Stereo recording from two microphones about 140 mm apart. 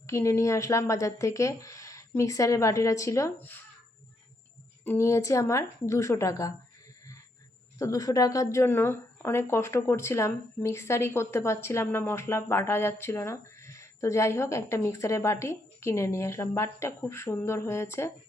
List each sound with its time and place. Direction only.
0.1 s speech: 20° left (ahead or behind)
4.9 s speech: 20° left (ahead or behind)
7.8 s speech: 25° left (ahead or behind)